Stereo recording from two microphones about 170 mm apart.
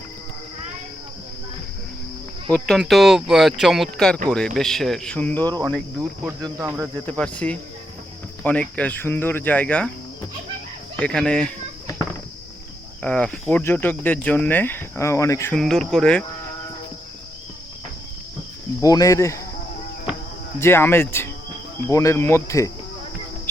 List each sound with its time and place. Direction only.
2.5 s speech: 5° left (ahead or behind)
6.4 s speech: 15° right (ahead or behind)
7.0 s speech: 10° left (ahead or behind)
10.9 s speech: 5° left (ahead or behind)
13.0 s speech: 5° left (ahead or behind)
15.5 s speech: 5° left (ahead or behind)
18.8 s speech: 20° left (ahead or behind)
20.6 s speech: 15° left (ahead or behind)